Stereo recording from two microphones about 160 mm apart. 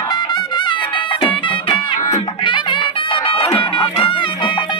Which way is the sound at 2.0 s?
20° left (ahead or behind).